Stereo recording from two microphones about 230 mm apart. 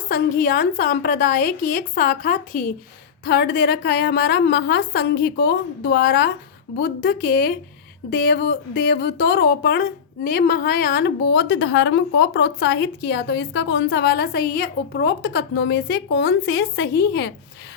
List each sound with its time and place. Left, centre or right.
0.1 s a woman's voice: left